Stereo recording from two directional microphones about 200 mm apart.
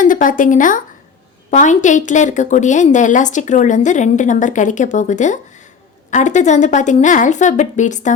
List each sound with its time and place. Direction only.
0.0 s a woman's voice: 40° left (ahead or behind)